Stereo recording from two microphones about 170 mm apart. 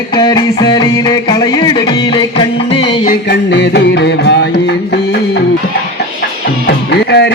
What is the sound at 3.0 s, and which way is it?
Music, 65° left (ahead or behind).